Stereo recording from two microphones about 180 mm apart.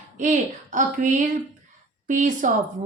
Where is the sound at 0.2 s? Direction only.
45° right (ahead or behind).